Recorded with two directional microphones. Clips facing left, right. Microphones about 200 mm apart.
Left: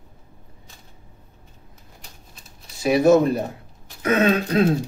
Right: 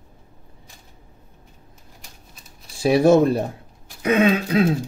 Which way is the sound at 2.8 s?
30° right (ahead or behind).